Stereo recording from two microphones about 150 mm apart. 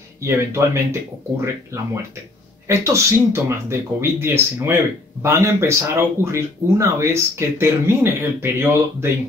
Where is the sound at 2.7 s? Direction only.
20° right (ahead or behind).